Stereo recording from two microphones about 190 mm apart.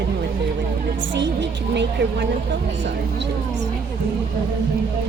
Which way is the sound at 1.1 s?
70° right (ahead or behind).